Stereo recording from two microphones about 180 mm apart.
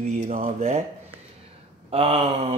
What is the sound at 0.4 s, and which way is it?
Mantra, 35° right (ahead or behind).